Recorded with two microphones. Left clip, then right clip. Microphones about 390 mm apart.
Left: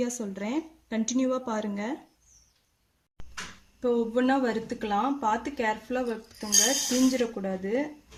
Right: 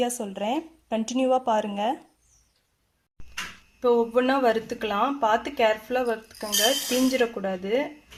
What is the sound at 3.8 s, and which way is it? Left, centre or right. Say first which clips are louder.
Speech: right 5 dB; centre.